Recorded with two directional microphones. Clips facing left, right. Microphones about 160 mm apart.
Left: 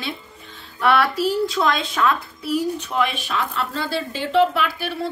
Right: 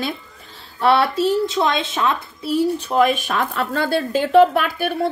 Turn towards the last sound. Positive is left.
turn(degrees=-50)  # may be behind; listen again after turning